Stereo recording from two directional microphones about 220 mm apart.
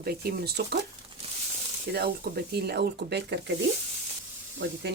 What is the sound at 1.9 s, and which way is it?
Speech, 45° right (ahead or behind).